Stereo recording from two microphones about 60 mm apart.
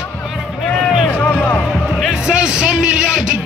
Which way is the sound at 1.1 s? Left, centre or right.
Left.